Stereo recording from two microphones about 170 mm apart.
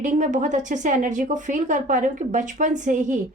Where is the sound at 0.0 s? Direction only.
45° right (ahead or behind).